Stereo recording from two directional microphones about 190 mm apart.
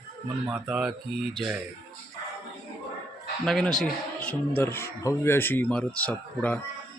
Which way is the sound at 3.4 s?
Centre (ahead or behind).